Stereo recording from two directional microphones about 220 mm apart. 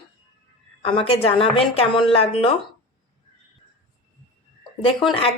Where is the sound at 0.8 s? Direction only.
25° left (ahead or behind).